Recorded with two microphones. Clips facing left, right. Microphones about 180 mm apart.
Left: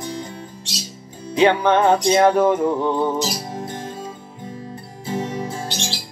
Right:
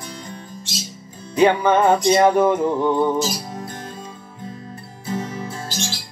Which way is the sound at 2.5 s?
10° left (ahead or behind).